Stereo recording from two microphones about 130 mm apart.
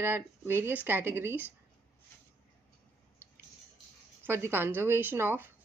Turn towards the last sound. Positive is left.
turn(degrees=-15)  # may be behind; listen again after turning